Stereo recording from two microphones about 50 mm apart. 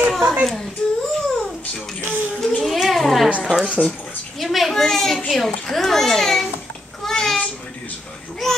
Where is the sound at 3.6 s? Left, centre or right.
Right.